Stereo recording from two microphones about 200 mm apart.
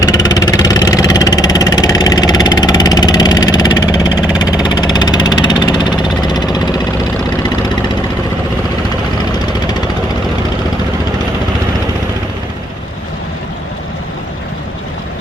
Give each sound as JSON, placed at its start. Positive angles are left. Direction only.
{"t": 0.0, "sound": "vehicle", "side_deg": 20}
{"t": 4.3, "sound": "engine", "side_deg": 20}
{"t": 6.2, "sound": "jackhammer", "side_deg": 20}